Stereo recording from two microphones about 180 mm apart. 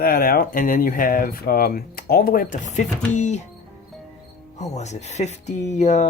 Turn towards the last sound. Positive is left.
turn(degrees=40)  # may be behind; listen again after turning